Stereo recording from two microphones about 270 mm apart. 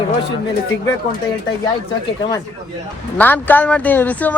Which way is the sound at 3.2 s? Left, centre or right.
Centre.